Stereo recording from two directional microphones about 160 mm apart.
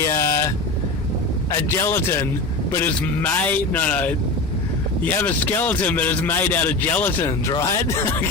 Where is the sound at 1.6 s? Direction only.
15° left (ahead or behind).